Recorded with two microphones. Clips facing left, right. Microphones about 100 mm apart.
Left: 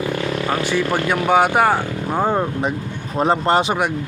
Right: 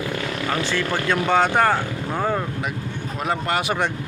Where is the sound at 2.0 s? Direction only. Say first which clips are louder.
Left 5 dB; 25° left (ahead or behind).